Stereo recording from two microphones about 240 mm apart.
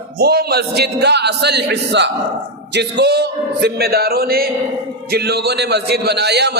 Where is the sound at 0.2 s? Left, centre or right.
Right.